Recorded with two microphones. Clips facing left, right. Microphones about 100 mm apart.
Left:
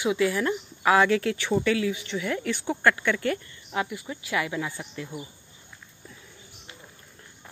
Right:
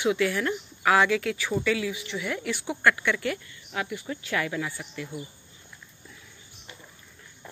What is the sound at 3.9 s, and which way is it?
A man's voice, 10° left (ahead or behind).